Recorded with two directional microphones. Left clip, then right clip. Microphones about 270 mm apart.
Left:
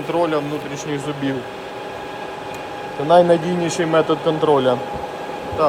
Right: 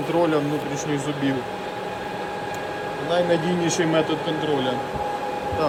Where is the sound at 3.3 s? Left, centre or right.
Centre.